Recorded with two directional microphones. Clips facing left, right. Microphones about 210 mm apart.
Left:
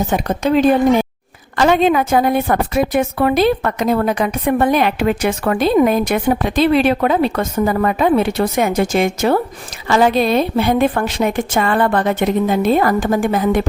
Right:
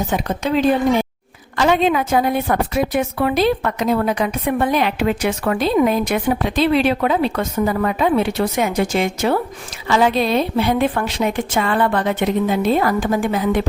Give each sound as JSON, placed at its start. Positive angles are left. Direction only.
{"t": 0.1, "sound": "a woman's voice", "side_deg": 45}